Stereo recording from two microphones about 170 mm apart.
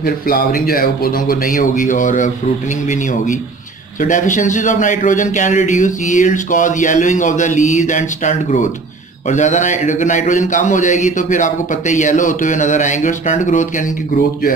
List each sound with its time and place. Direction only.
0.0 s speech: 60° left (ahead or behind)
4.0 s a man's voice: 50° left (ahead or behind)